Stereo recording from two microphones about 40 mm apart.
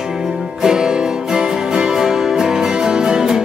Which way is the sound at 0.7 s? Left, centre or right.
Centre.